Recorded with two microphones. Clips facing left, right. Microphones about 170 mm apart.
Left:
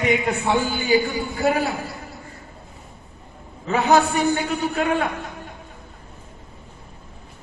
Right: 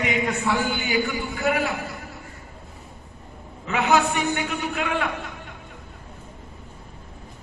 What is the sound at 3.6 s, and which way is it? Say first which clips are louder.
A man's voice: left 3 dB; 35° left (ahead or behind).